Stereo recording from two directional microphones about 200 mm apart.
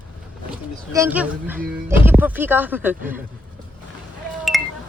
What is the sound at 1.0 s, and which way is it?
Speech, 10° right (ahead or behind).